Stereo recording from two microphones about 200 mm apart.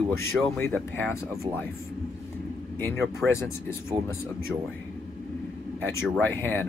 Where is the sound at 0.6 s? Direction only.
10° left (ahead or behind).